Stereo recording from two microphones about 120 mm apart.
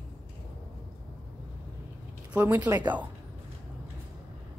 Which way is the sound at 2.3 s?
20° right (ahead or behind).